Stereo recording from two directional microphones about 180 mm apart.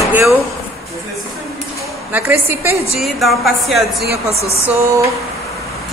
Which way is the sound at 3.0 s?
Centre (ahead or behind).